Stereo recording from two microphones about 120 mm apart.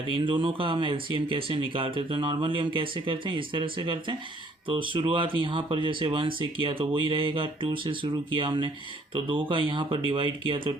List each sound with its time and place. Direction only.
0.2 s speech: 45° right (ahead or behind)